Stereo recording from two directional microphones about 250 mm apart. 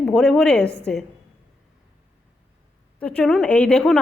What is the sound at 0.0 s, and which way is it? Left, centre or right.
Speech, centre.